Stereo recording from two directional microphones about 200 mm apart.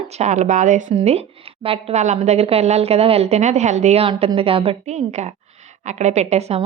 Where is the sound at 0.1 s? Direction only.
35° right (ahead or behind).